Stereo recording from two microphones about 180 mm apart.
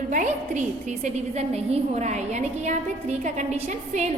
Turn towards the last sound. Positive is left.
turn(degrees=-40)  # may be behind; listen again after turning